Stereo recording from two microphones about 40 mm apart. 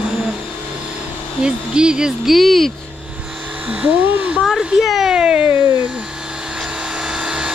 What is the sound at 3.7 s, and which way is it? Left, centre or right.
Speech, right.